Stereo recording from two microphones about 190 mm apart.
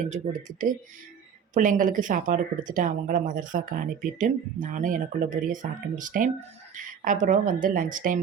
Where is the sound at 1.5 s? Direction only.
45° right (ahead or behind).